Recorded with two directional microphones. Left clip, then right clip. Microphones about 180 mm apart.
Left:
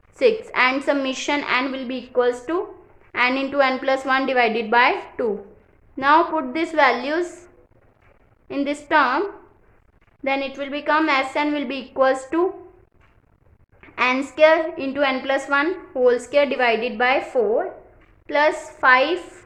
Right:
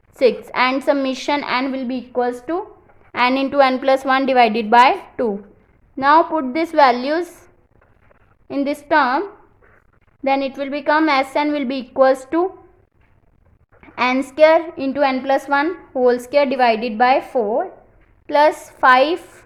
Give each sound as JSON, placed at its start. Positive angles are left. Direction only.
{"t": 0.1, "sound": "a woman's voice", "side_deg": -30}
{"t": 3.1, "sound": "a woman's voice", "side_deg": -30}
{"t": 10.2, "sound": "a woman's voice", "side_deg": -30}
{"t": 13.8, "sound": "a woman's voice", "side_deg": -30}
{"t": 18.3, "sound": "a woman's voice", "side_deg": -30}